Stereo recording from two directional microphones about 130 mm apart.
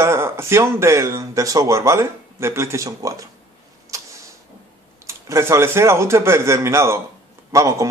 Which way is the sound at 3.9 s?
25° right (ahead or behind).